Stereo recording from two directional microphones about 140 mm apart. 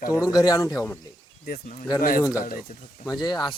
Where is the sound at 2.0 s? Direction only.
90° left.